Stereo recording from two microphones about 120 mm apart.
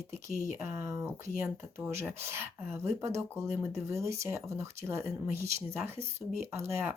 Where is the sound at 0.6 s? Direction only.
25° right (ahead or behind).